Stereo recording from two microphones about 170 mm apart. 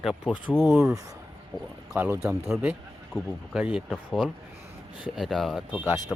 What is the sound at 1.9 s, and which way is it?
Speech, 15° right (ahead or behind).